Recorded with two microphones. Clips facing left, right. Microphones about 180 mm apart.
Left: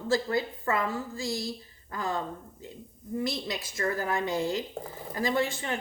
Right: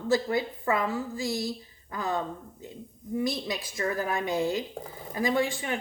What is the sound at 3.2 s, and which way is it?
Speech, 15° right (ahead or behind).